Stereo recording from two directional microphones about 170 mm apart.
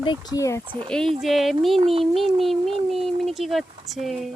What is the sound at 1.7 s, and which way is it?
Speech, 35° right (ahead or behind).